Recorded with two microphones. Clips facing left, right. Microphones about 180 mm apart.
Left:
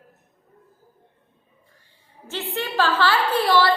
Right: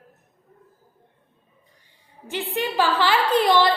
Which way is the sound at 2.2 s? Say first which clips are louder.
Right 2 dB; 15° right (ahead or behind).